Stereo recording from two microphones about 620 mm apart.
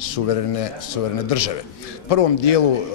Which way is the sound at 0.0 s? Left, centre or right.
Left.